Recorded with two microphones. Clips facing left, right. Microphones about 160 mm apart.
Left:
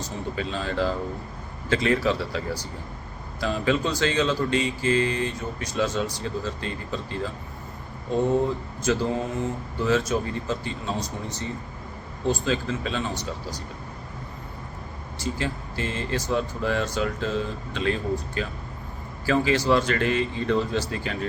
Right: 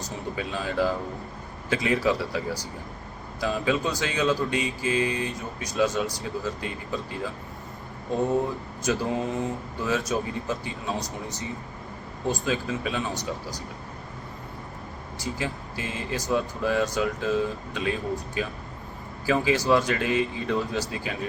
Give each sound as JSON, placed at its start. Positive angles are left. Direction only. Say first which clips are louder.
{"t": 0.0, "sound": "speech", "louder": "left 2 dB", "side_deg": -15}
{"t": 8.8, "sound": "speech", "louder": "left 1 dB", "side_deg": -15}
{"t": 12.2, "sound": "speech", "louder": "left 2 dB", "side_deg": -15}
{"t": 15.2, "sound": "speech", "louder": "left 2 dB", "side_deg": -15}